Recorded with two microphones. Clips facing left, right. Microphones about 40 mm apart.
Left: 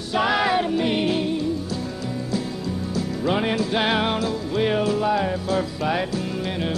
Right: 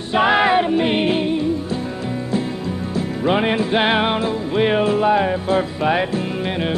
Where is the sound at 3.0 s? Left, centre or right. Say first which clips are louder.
Right 5 dB; right.